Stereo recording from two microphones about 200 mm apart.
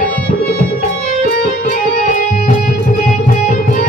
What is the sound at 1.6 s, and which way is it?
Music, 40° left (ahead or behind).